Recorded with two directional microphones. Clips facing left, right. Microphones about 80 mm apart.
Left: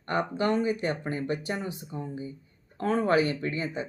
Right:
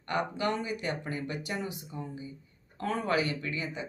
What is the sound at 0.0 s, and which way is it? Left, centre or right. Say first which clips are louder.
Speech: left 3 dB; left.